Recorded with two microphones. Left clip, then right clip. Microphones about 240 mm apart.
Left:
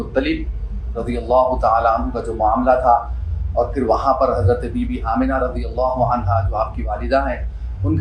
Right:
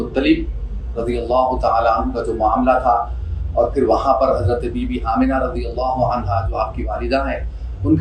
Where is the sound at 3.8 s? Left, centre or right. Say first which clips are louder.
Even; centre.